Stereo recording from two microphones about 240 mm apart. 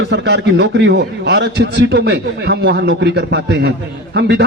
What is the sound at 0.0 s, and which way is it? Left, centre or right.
A man's voice, right.